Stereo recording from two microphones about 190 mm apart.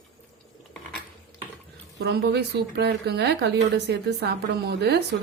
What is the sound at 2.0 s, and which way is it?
Speech, 60° right (ahead or behind).